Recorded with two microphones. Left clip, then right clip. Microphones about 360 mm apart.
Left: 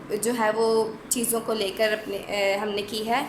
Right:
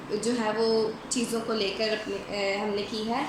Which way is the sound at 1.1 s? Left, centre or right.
Centre.